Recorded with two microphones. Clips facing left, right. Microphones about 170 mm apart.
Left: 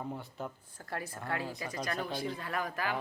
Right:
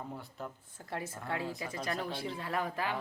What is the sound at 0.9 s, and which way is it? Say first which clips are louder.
Speech: even; 20° right (ahead or behind).